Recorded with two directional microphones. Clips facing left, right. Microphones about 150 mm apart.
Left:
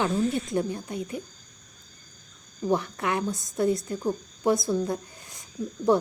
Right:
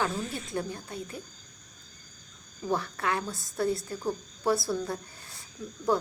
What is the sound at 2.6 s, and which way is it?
A woman's voice, 20° left (ahead or behind).